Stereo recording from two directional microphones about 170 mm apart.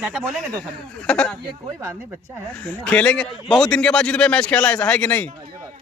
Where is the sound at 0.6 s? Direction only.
5° left (ahead or behind).